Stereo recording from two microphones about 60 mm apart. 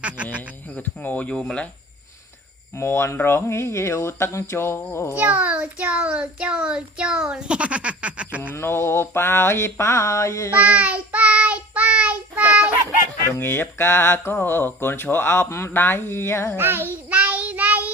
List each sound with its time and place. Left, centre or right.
0.7 s speech: left
2.7 s mantra: left
5.1 s a child's voice: right
8.5 s mantra: left
10.5 s child singing: right
13.4 s speech: left
15.7 s speech: left
16.6 s child singing: right
17.1 s child singing: right